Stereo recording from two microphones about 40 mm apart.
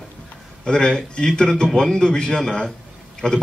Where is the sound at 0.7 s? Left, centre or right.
Left.